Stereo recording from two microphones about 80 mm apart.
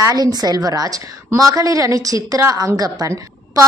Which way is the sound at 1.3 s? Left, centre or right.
Right.